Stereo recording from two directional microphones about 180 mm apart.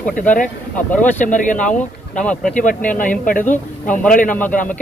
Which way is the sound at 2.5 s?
45° left (ahead or behind).